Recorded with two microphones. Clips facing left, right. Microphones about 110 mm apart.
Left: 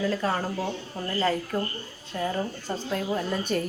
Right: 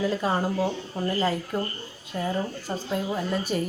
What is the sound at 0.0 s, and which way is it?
A woman's voice, 15° right (ahead or behind).